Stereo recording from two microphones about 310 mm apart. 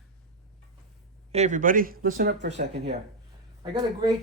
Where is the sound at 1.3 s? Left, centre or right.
Right.